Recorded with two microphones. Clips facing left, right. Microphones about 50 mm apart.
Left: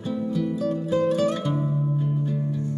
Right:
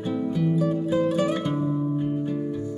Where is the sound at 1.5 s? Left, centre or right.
Right.